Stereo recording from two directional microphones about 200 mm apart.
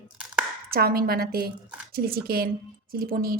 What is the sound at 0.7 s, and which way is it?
A woman's voice, 50° right (ahead or behind).